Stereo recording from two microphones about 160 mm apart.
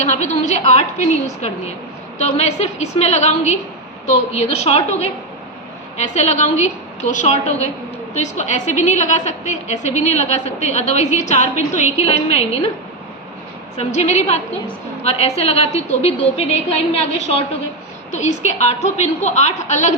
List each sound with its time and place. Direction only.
0.0 s a woman's voice: 45° left (ahead or behind)
2.4 s a woman's voice: 45° left (ahead or behind)
13.7 s a woman's voice: 45° left (ahead or behind)